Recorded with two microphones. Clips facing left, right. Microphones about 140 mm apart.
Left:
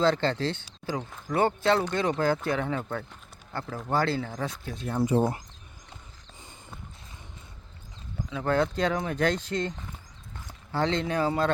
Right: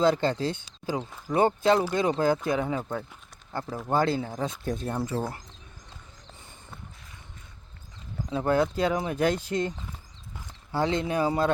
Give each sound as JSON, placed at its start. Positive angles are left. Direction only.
{"t": 0.0, "sound": "speech", "side_deg": -15}
{"t": 4.6, "sound": "speech", "side_deg": -45}
{"t": 5.0, "sound": "speech", "side_deg": 20}
{"t": 8.4, "sound": "speech", "side_deg": -10}